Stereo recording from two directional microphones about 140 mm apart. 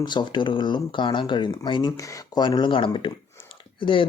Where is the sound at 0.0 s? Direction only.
35° left (ahead or behind).